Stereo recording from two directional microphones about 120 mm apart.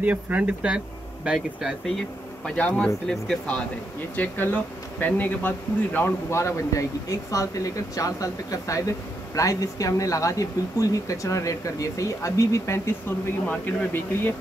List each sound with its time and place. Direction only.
0.0 s speech: 10° right (ahead or behind); by 14.3 s 15° left (ahead or behind)